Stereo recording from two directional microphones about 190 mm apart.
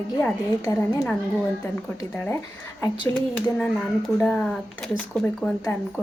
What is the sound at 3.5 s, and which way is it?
Speech, centre (ahead or behind).